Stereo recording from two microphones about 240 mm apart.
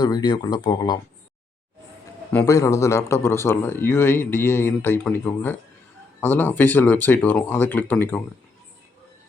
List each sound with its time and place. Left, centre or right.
0.0 s speech: centre
2.3 s speech: centre